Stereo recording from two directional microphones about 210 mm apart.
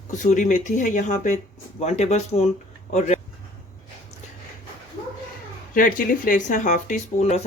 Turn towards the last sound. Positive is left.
turn(degrees=35)  # may be behind; listen again after turning